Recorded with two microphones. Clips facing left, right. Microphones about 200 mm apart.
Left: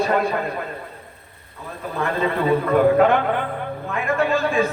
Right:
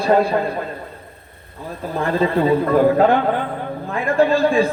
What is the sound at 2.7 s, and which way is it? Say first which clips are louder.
A man's voice: even; 35° right (ahead or behind).